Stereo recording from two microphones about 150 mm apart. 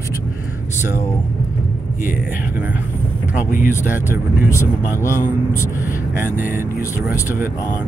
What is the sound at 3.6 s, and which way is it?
Speech, 15° right (ahead or behind).